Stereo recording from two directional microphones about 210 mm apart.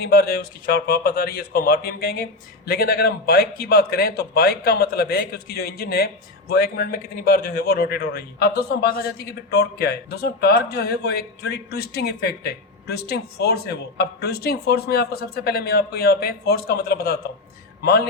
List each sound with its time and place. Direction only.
0.0 s a man's voice: 45° left (ahead or behind)